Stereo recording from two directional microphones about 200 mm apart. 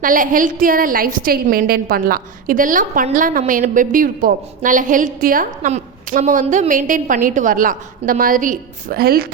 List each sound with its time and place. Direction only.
0.0 s a woman's voice: 45° right (ahead or behind)